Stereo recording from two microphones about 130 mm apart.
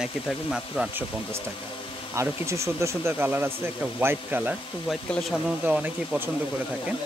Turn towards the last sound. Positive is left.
turn(degrees=-10)  # may be behind; listen again after turning